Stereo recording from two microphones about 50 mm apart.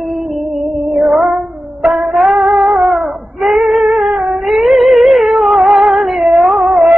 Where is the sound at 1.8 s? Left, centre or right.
Centre.